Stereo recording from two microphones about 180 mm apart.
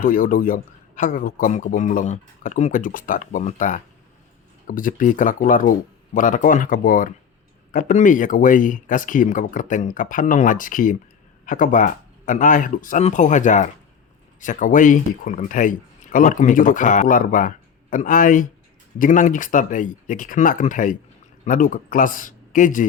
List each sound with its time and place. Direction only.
0.0 s a man's voice: 50° left (ahead or behind)